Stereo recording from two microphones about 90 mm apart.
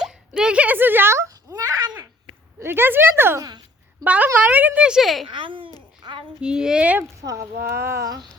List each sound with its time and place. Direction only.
0.3 s speech: 10° right (ahead or behind); by 1.9 s 40° right (ahead or behind)
2.6 s a woman's voice: 25° right (ahead or behind); by 5.2 s centre (ahead or behind)
5.3 s speech: 65° right (ahead or behind)
6.0 s a sound: 60° right (ahead or behind)
6.4 s speech: 10° right (ahead or behind)
7.2 s speech: 35° right (ahead or behind)